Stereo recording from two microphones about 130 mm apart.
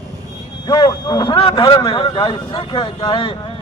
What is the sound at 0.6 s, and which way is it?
Speech, 35° left (ahead or behind).